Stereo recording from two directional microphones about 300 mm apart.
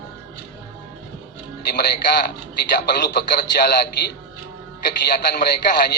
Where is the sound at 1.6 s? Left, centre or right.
Left.